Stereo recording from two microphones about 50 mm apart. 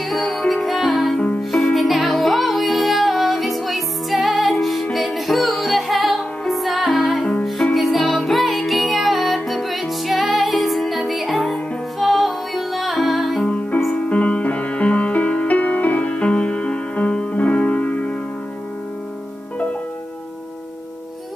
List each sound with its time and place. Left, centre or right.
0.1 s music: centre
13.5 s music: left